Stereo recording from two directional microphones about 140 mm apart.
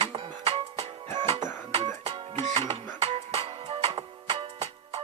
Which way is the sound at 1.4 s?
30° right (ahead or behind).